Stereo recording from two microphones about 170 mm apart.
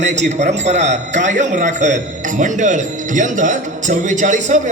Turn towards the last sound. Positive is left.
turn(degrees=-45)  # may be behind; listen again after turning